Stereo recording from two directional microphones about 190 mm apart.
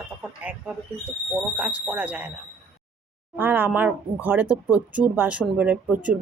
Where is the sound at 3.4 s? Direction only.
10° right (ahead or behind).